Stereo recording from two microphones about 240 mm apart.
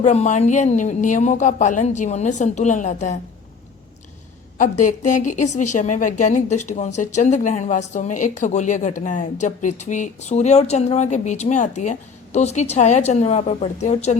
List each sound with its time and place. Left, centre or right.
0.0 s a woman's voice: left
4.5 s a woman's voice: left